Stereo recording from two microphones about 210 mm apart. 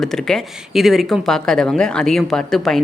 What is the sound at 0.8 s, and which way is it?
A woman's voice, centre (ahead or behind).